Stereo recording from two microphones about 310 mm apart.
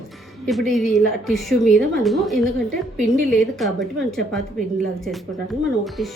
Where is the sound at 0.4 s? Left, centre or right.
Centre.